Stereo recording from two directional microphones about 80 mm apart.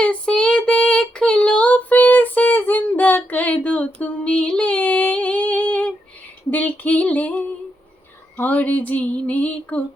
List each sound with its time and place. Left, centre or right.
0.0 s child singing: centre
6.5 s female singing: centre